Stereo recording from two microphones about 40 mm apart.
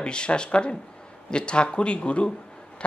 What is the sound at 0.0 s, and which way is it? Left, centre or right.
Speech, left.